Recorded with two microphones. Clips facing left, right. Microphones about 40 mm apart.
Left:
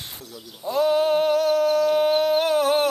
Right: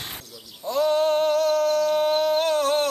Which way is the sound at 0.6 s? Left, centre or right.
Centre.